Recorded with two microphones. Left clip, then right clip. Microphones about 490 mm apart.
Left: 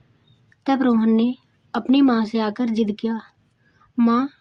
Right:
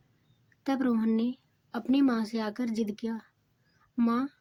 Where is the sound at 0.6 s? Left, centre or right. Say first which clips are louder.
Left 10 dB; right.